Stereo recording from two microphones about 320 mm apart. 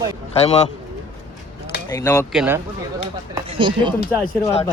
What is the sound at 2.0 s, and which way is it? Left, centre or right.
Speech, centre.